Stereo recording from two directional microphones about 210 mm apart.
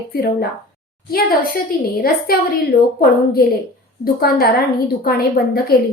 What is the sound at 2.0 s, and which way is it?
A woman's voice, 45° left (ahead or behind).